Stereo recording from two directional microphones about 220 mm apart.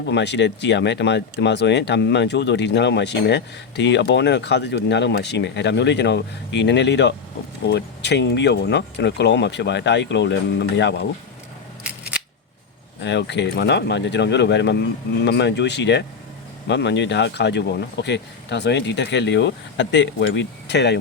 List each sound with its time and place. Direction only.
0.1 s speech: 50° left (ahead or behind)
11.8 s scissors: 5° right (ahead or behind)
13.0 s speech: 50° left (ahead or behind)